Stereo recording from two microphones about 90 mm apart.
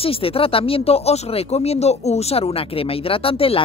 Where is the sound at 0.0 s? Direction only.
90° left.